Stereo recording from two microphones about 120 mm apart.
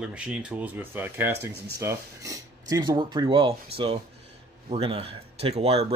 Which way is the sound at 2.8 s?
40° right (ahead or behind).